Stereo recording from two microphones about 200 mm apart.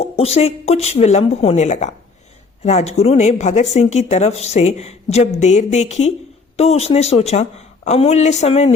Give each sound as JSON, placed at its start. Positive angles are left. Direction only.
{"t": 0.0, "sound": "a woman's voice", "side_deg": 30}